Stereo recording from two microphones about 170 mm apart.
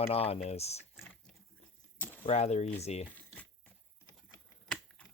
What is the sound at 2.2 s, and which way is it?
Speech, 40° left (ahead or behind).